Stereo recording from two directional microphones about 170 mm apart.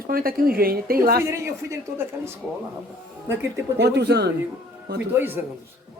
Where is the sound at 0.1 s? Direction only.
60° right (ahead or behind).